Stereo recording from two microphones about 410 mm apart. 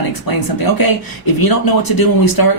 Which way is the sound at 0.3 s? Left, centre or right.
Left.